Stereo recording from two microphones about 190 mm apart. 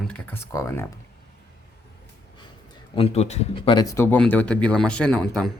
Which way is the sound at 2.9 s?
30° left (ahead or behind).